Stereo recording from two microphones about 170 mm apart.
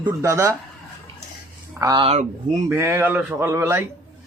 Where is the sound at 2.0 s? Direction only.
40° right (ahead or behind).